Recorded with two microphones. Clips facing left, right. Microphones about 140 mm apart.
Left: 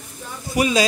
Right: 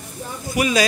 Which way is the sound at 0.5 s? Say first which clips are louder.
Left 1 dB; 25° left (ahead or behind).